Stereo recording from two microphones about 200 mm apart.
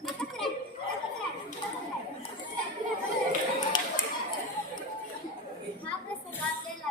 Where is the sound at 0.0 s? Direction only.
Centre (ahead or behind).